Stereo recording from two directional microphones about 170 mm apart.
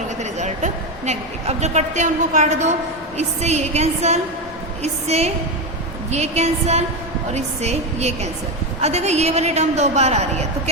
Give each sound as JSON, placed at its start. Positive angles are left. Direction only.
{"t": 0.2, "sound": "a woman's voice", "side_deg": -45}